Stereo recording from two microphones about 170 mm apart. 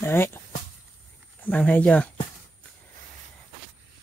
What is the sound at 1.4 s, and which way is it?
Speech, 10° left (ahead or behind).